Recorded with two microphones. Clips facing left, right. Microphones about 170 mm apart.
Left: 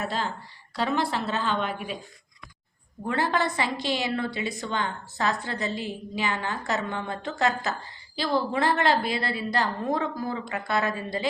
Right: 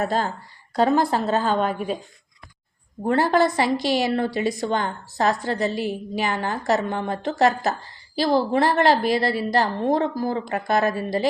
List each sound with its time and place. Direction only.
0.0 s a woman's voice: 45° right (ahead or behind)
3.0 s a woman's voice: 40° right (ahead or behind)